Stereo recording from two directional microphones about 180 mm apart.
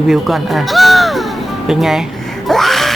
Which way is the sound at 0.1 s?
Centre (ahead or behind).